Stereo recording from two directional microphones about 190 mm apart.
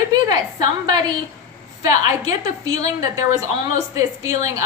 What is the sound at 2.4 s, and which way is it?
Speech, 20° right (ahead or behind).